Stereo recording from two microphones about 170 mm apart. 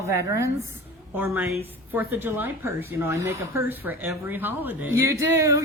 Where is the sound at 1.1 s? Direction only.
10° right (ahead or behind).